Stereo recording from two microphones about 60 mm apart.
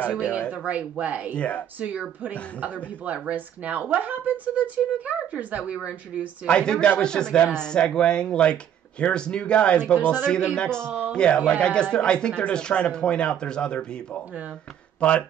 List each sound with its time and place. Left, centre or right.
0.5 s speech: right
1.3 s speech: centre
1.8 s speech: right
6.4 s speech: centre